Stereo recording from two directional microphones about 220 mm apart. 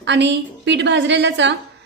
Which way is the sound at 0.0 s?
55° right (ahead or behind).